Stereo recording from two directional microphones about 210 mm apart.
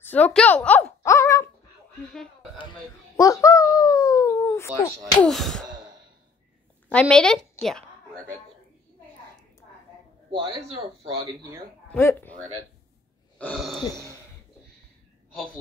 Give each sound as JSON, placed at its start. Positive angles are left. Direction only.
{"t": 0.0, "sound": "a sound", "side_deg": 5}
{"t": 3.2, "sound": "speech", "side_deg": 15}
{"t": 6.9, "sound": "a woman's voice", "side_deg": 5}
{"t": 10.3, "sound": "speech", "side_deg": -25}
{"t": 11.9, "sound": "speech", "side_deg": 10}
{"t": 13.4, "sound": "a sound", "side_deg": 0}